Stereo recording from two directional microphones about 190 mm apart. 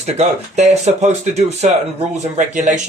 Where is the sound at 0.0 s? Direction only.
35° right (ahead or behind).